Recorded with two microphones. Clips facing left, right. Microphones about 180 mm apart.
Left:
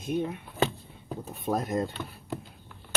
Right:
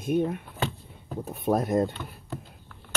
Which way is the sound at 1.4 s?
50° right (ahead or behind).